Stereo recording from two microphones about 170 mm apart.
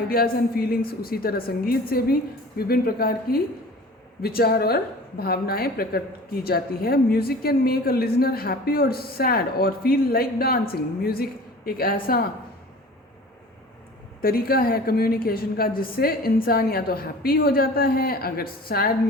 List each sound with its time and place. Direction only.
0.1 s a woman's voice: 60° left (ahead or behind)
14.2 s a woman's voice: 60° left (ahead or behind)